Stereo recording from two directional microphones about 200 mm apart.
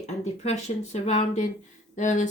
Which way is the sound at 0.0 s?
35° left (ahead or behind).